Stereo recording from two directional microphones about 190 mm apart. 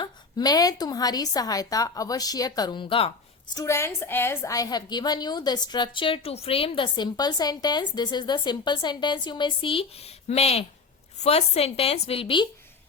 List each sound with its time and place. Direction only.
0.0 s a woman's voice: 20° left (ahead or behind)